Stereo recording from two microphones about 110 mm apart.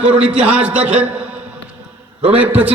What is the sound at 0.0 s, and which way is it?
A man's voice, 10° right (ahead or behind).